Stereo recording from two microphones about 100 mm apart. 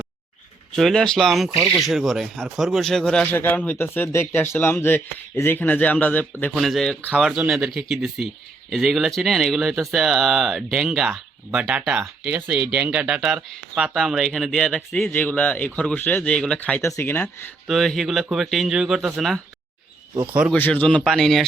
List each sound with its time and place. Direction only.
0.8 s speech: 5° left (ahead or behind)
3.3 s speech: 20° left (ahead or behind)
6.5 s speech: centre (ahead or behind)
16.8 s speech: 25° left (ahead or behind)
17.7 s speech: centre (ahead or behind)
20.6 s speech: 20° left (ahead or behind)
20.8 s speech: 5° left (ahead or behind)